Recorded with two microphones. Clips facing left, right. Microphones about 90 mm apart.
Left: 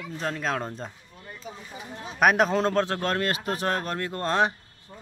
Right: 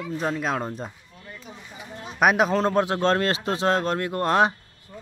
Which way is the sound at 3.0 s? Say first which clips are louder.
Right 5 dB; 30° right (ahead or behind).